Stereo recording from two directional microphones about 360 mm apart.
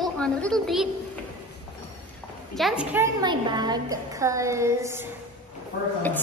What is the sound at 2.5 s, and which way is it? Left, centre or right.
A woman's voice, centre.